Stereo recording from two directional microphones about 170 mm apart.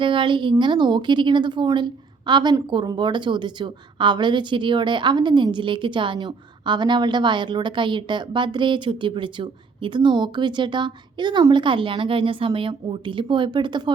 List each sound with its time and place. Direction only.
0.0 s a woman's voice: 30° right (ahead or behind)